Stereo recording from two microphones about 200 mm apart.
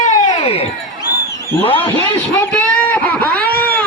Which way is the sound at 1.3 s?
15° left (ahead or behind).